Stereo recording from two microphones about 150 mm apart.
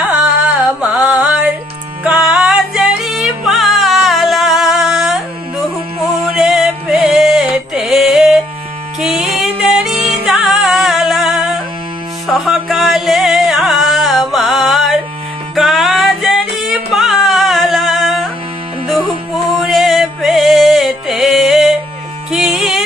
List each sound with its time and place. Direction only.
0.1 s music: 5° right (ahead or behind)
9.9 s music: 45° right (ahead or behind)
10.2 s music: 5° right (ahead or behind)